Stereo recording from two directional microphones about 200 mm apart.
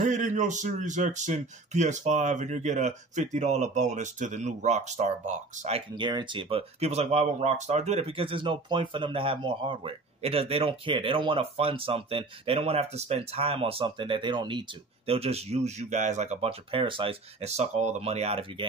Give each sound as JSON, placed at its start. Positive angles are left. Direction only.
{"t": 0.0, "sound": "a man's voice", "side_deg": -35}